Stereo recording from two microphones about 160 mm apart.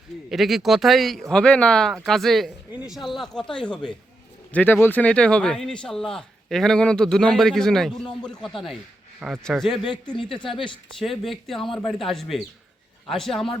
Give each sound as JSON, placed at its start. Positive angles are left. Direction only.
{"t": 0.3, "sound": "a man's voice", "side_deg": 0}
{"t": 10.3, "sound": "a woman's voice", "side_deg": 30}
{"t": 11.0, "sound": "a man's voice", "side_deg": 0}